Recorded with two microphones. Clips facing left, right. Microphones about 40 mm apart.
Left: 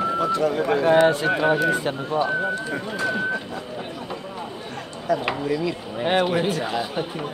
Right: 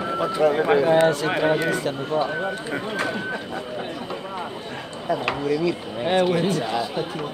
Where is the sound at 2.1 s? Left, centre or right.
Left.